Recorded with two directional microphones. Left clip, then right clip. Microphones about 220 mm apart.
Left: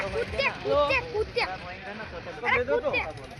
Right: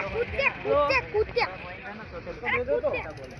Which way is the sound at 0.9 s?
40° right (ahead or behind).